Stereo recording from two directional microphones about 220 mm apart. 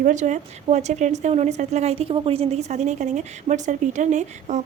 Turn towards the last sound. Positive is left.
turn(degrees=-35)  # may be behind; listen again after turning